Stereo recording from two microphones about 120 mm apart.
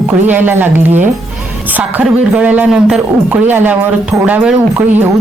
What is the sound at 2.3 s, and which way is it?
A woman's voice, 10° right (ahead or behind).